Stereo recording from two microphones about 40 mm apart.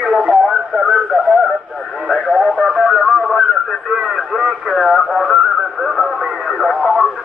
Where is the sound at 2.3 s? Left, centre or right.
Centre.